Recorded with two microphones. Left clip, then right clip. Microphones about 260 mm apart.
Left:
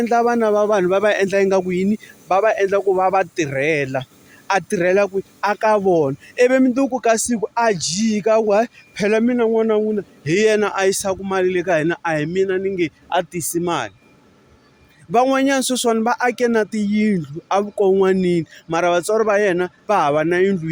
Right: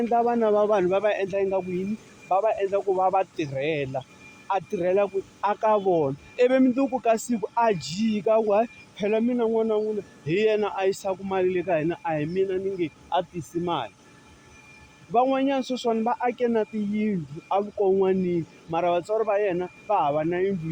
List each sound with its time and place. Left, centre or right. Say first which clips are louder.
0.0 s speech: left 6 dB; left
15.1 s speech: left 6 dB; left